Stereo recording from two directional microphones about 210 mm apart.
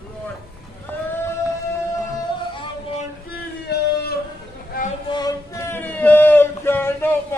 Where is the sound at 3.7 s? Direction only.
50° left (ahead or behind).